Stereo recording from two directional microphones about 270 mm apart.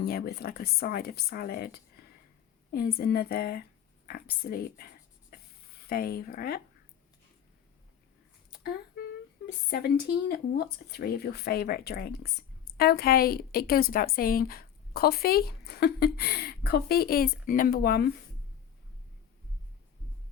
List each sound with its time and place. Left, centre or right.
0.0 s a woman's voice: left
5.9 s a woman's voice: left
9.6 s a woman's voice: left